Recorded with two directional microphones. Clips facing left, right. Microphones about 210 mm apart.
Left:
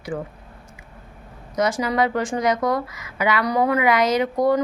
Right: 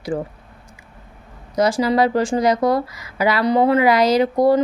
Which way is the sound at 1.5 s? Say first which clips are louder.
Right 4 dB; 30° right (ahead or behind).